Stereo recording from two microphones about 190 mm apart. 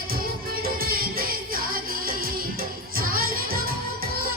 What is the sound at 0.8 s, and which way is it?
Music, 50° right (ahead or behind).